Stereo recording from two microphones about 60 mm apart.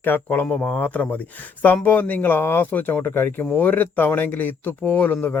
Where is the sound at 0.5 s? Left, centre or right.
Centre.